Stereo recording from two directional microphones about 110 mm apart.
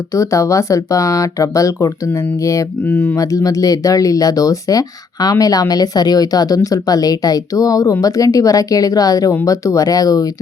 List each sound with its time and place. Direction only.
0.1 s speech: 30° left (ahead or behind)
2.8 s speech: 15° left (ahead or behind)
3.2 s speech: 30° left (ahead or behind)